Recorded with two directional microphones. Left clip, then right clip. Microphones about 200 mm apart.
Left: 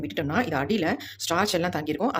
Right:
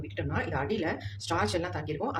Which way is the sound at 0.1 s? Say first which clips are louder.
Left 6 dB; 60° left (ahead or behind).